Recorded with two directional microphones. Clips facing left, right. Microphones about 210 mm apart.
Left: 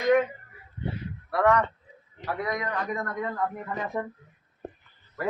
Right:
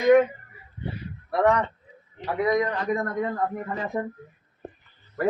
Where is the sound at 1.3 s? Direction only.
25° right (ahead or behind).